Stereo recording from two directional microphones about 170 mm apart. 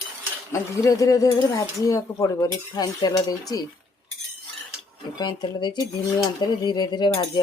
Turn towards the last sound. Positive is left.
turn(degrees=25)  # may be behind; listen again after turning